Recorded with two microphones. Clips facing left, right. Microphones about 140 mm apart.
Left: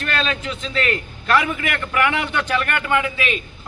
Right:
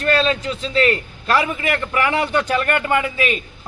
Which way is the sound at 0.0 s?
35° right (ahead or behind).